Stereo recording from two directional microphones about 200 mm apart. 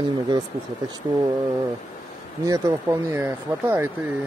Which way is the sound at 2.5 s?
15° right (ahead or behind).